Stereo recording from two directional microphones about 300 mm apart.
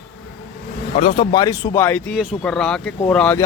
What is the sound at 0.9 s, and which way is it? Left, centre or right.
A man's voice, centre.